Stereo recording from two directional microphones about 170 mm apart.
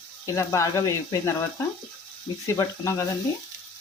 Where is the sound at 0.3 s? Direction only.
20° left (ahead or behind).